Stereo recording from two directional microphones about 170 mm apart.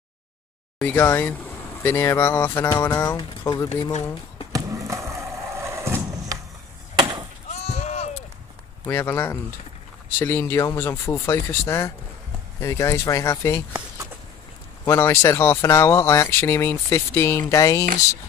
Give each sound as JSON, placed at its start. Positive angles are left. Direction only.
{"t": 0.7, "sound": "speech", "side_deg": 10}
{"t": 4.5, "sound": "skateboard", "side_deg": -20}
{"t": 7.4, "sound": "a sound", "side_deg": 40}
{"t": 8.8, "sound": "speech", "side_deg": 15}
{"t": 14.9, "sound": "speech", "side_deg": 15}